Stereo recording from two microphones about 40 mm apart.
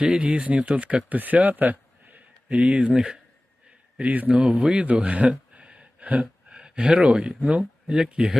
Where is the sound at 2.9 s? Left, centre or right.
Right.